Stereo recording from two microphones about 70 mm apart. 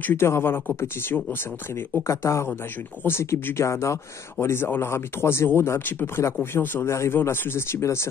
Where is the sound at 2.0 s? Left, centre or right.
Left.